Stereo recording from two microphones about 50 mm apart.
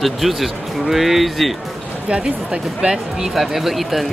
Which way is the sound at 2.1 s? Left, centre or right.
Centre.